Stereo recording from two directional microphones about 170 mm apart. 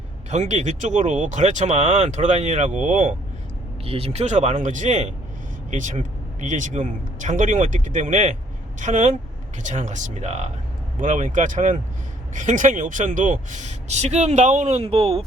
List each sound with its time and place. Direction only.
0.3 s speech: 45° right (ahead or behind)
3.8 s speech: 35° right (ahead or behind)